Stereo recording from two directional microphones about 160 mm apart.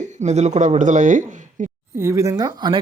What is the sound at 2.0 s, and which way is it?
Speech, 20° right (ahead or behind).